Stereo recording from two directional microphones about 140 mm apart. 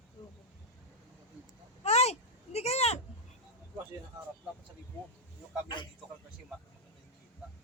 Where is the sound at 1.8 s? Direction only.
50° left (ahead or behind).